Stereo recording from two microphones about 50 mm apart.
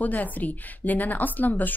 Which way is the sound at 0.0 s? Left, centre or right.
Left.